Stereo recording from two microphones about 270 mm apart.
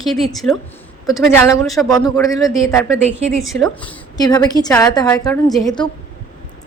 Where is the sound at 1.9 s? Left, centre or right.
Centre.